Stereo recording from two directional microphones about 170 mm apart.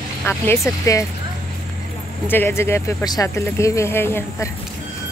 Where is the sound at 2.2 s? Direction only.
10° left (ahead or behind).